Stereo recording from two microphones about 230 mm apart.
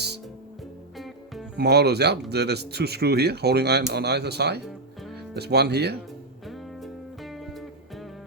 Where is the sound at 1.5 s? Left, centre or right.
Right.